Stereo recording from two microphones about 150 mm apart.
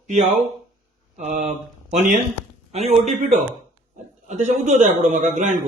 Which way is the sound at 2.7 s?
45° right (ahead or behind).